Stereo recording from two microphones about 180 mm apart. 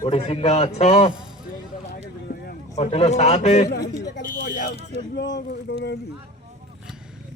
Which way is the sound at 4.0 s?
70° left (ahead or behind).